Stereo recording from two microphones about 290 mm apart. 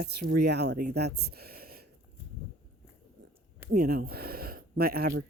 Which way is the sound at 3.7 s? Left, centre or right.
Right.